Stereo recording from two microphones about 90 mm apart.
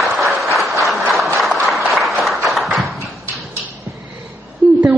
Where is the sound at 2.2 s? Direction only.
Centre (ahead or behind).